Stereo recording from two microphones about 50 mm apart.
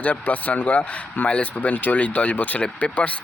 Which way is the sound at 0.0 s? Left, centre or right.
Left.